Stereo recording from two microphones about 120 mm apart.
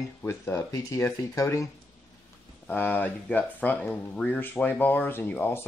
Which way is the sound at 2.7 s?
15° left (ahead or behind).